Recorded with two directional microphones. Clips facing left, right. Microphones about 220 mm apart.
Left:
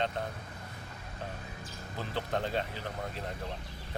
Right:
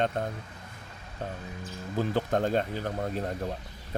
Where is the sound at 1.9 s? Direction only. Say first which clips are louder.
Right 8 dB; 45° right (ahead or behind).